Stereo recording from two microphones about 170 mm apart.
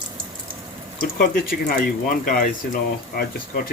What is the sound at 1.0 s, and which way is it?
Speech, 60° left (ahead or behind).